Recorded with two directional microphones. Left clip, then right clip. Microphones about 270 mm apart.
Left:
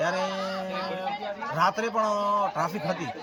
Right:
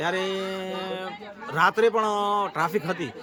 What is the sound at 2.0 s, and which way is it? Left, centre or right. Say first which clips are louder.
Speech: right 1 dB; right.